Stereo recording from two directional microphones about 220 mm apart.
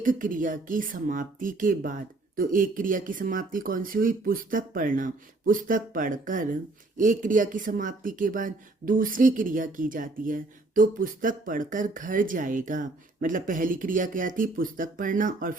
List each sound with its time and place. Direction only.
0.0 s speech: 35° right (ahead or behind)